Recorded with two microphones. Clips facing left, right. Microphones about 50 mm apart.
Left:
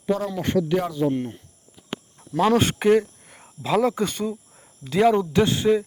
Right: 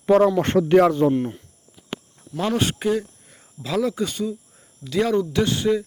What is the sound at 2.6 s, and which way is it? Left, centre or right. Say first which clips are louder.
Speech: left 4 dB; left.